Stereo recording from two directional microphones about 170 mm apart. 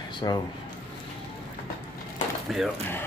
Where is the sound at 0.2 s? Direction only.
25° left (ahead or behind).